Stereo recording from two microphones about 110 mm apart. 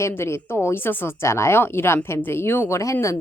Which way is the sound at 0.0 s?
20° left (ahead or behind).